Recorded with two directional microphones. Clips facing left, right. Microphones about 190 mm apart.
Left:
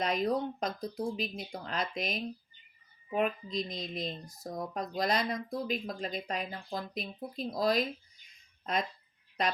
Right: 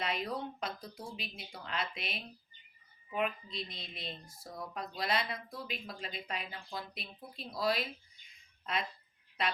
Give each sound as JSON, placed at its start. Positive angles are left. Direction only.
{"t": 0.0, "sound": "speech", "side_deg": 40}